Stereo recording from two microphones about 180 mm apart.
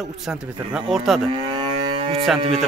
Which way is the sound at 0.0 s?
5° right (ahead or behind).